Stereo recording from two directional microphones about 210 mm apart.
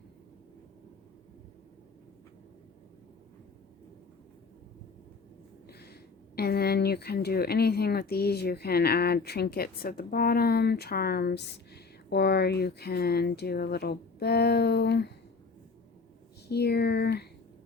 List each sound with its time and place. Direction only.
5.6 s speech: 50° left (ahead or behind)
16.5 s speech: 50° left (ahead or behind)